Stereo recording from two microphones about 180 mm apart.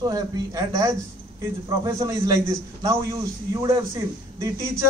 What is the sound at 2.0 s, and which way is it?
A man's voice, 20° right (ahead or behind).